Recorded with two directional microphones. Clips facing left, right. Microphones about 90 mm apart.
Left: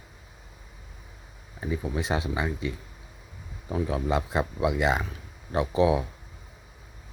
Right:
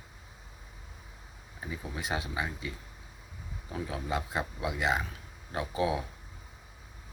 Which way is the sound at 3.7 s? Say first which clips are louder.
Left 7 dB; 35° left (ahead or behind).